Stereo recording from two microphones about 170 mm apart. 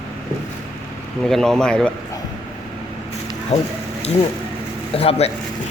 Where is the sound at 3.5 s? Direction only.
40° left (ahead or behind).